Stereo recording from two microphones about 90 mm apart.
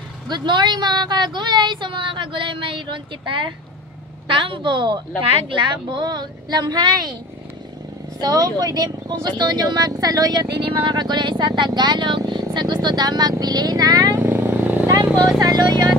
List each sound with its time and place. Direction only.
0.3 s speech: 55° right (ahead or behind)
8.2 s speech: 45° right (ahead or behind)
10.6 s speech: 60° right (ahead or behind); by 14.1 s 45° right (ahead or behind)
14.1 s vehicle: 25° right (ahead or behind)
15.4 s a sound: 50° right (ahead or behind)